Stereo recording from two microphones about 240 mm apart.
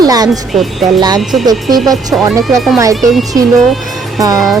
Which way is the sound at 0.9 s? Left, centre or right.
Centre.